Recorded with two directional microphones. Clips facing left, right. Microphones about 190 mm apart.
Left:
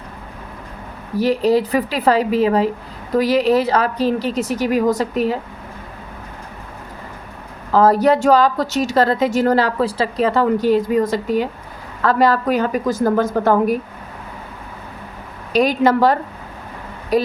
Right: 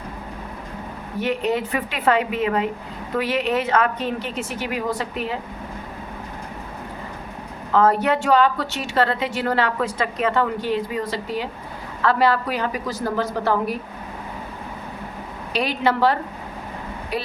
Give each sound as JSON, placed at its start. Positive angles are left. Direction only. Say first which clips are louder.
{"t": 1.1, "sound": "a woman's voice", "louder": "left 7 dB", "side_deg": 35}
{"t": 7.7, "sound": "a woman's voice", "louder": "left 5 dB", "side_deg": 35}
{"t": 15.5, "sound": "a woman's voice", "louder": "left 7 dB", "side_deg": 45}